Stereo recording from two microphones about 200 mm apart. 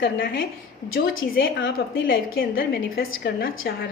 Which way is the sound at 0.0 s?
50° left (ahead or behind).